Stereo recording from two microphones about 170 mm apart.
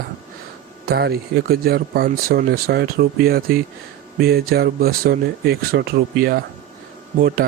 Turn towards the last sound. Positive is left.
turn(degrees=-55)  # may be behind; listen again after turning